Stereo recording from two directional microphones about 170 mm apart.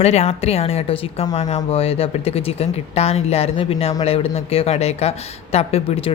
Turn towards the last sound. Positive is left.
turn(degrees=35)  # may be behind; listen again after turning